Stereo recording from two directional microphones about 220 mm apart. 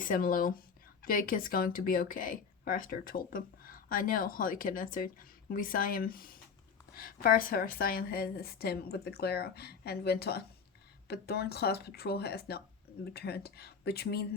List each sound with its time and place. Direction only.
0.0 s a woman's voice: 40° left (ahead or behind)